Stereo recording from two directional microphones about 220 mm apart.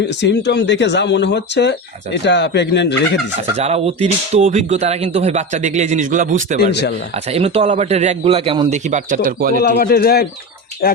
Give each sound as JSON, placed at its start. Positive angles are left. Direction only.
{"t": 0.2, "sound": "speech", "side_deg": 55}
{"t": 3.6, "sound": "speech", "side_deg": -30}
{"t": 6.6, "sound": "speech", "side_deg": 50}
{"t": 7.3, "sound": "speech", "side_deg": -25}
{"t": 9.6, "sound": "speech", "side_deg": 45}